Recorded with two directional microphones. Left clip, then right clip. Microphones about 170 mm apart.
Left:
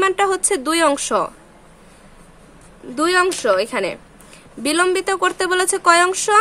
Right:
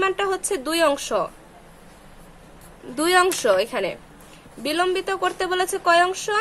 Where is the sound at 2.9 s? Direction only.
15° left (ahead or behind).